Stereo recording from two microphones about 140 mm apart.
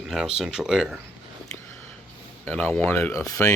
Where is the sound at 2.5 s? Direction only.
10° left (ahead or behind).